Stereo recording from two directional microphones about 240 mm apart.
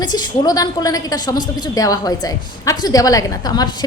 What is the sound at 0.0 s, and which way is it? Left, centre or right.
A woman's voice, centre.